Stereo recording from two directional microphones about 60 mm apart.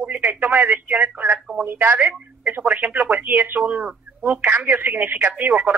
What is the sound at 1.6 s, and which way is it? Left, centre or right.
Speech, right.